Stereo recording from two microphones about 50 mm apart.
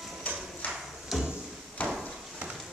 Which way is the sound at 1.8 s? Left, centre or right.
Left.